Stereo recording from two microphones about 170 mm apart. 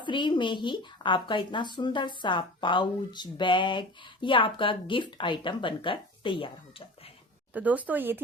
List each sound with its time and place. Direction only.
0.0 s speech: 25° left (ahead or behind)
7.5 s speech: 10° right (ahead or behind)